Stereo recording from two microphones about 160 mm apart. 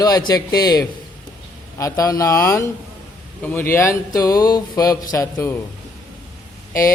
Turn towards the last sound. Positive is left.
turn(degrees=20)  # may be behind; listen again after turning